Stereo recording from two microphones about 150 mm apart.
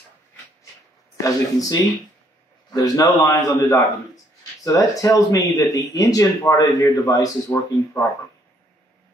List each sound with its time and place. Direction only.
1.2 s speech: 25° left (ahead or behind)